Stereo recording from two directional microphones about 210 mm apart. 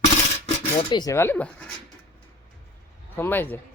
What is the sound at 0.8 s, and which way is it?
Speech, 20° left (ahead or behind).